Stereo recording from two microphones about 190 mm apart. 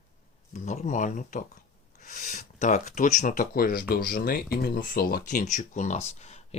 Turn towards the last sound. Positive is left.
turn(degrees=35)  # may be behind; listen again after turning